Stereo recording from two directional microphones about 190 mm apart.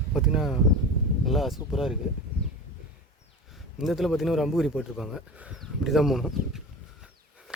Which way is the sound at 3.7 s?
Centre (ahead or behind).